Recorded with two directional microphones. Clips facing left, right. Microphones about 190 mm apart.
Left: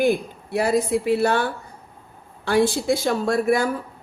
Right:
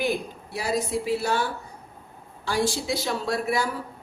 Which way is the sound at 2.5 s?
60° left (ahead or behind).